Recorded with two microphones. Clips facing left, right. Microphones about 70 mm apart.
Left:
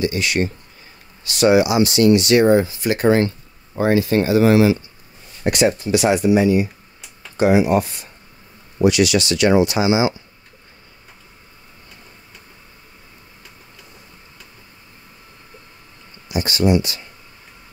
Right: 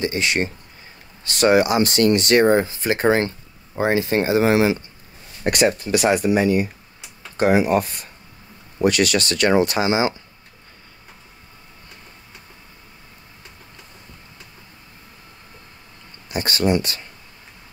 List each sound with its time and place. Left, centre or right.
0.0 s speech: right
1.3 s speech: right
5.5 s speech: right
16.3 s speech: right